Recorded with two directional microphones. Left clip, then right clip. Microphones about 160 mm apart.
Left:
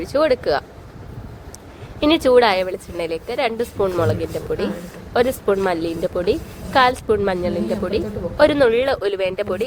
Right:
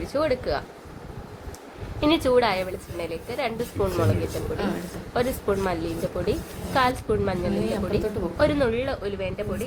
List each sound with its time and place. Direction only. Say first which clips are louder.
0.0 s a woman's voice: left 7 dB; 50° left (ahead or behind)
2.0 s a woman's voice: left 7 dB; 45° left (ahead or behind)
5.1 s a woman's voice: left 7 dB; 50° left (ahead or behind); by 9.6 s 75° left (ahead or behind)